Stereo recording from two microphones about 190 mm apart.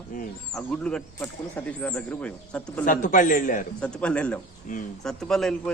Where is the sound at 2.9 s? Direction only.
45° left (ahead or behind).